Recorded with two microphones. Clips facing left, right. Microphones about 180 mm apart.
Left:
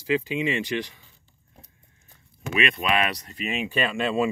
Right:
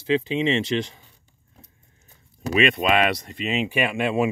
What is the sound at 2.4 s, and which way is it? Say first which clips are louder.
Speech: right 5 dB; 35° right (ahead or behind).